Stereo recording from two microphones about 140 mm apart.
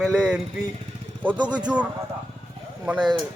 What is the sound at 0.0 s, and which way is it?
Speech, 5° right (ahead or behind).